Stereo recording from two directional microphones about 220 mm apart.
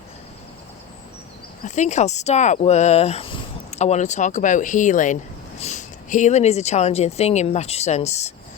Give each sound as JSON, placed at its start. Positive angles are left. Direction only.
{"t": 1.6, "sound": "speech", "side_deg": 30}